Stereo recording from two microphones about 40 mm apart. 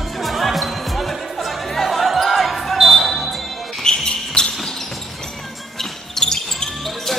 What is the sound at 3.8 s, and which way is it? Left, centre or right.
Basketball bounce, centre.